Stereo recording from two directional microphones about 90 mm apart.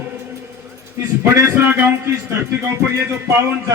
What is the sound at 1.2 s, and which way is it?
Speech, 30° right (ahead or behind).